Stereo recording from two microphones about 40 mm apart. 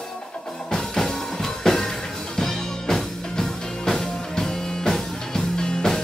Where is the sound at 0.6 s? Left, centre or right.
Centre.